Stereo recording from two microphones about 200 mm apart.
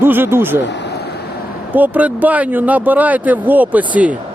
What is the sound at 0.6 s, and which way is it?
Speech, 60° left (ahead or behind).